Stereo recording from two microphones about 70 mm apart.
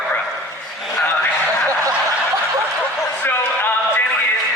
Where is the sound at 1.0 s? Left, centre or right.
Left.